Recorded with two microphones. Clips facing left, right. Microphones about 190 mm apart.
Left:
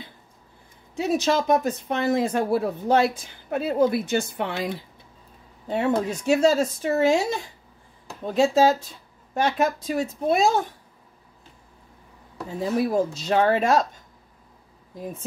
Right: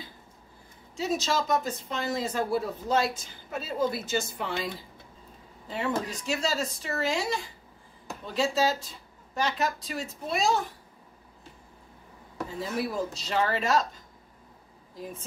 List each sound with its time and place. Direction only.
0.9 s speech: 60° left (ahead or behind)
5.7 s speech: 45° left (ahead or behind)
8.3 s speech: 50° left (ahead or behind)
12.5 s speech: 45° left (ahead or behind)